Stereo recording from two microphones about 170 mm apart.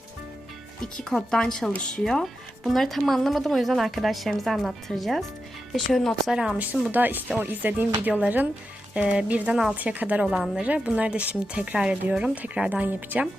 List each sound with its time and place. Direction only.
1.1 s a woman's voice: 5° left (ahead or behind)